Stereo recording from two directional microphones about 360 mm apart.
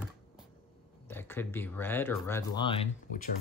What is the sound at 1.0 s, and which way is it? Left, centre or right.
Speech, centre.